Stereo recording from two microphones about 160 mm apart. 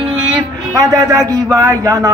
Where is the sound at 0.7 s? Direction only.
20° right (ahead or behind).